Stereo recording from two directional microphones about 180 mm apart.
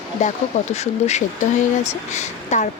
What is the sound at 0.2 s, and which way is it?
A woman's voice, 40° left (ahead or behind).